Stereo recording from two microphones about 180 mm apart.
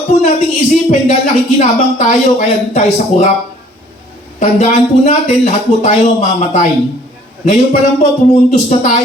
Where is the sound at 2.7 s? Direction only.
40° left (ahead or behind).